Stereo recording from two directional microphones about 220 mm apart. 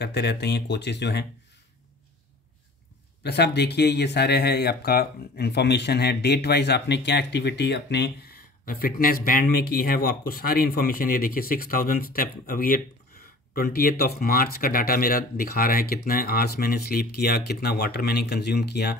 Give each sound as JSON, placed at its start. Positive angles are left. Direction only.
{"t": 0.0, "sound": "speech", "side_deg": 50}
{"t": 3.3, "sound": "speech", "side_deg": 50}